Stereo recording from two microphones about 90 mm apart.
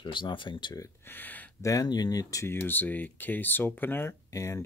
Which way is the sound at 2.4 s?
25° left (ahead or behind).